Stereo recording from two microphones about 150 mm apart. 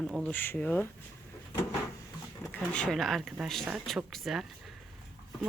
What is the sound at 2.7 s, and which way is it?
Speech, 5° left (ahead or behind).